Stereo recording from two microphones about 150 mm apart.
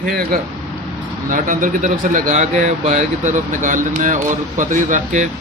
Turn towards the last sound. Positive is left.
turn(degrees=-55)  # may be behind; listen again after turning